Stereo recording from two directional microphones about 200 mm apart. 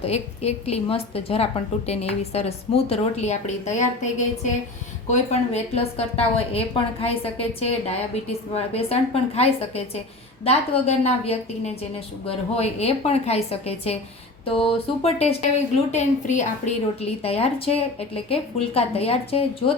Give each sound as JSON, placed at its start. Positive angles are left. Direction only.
{"t": 0.0, "sound": "a woman's voice", "side_deg": 30}